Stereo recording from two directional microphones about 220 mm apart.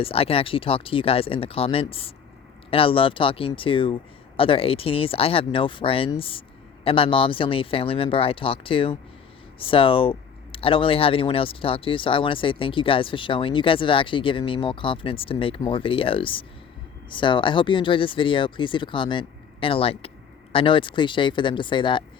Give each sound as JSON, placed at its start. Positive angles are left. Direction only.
{"t": 0.0, "sound": "speech", "side_deg": 25}